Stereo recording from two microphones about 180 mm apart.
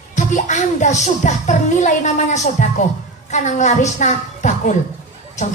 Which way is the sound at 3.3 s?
40° left (ahead or behind).